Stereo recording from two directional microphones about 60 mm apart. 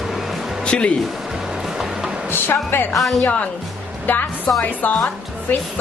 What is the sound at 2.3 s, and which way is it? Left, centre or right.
Speech, left.